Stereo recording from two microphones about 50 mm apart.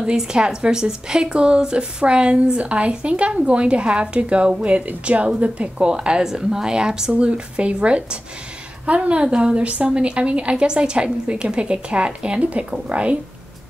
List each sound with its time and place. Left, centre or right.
0.0 s a woman's voice: centre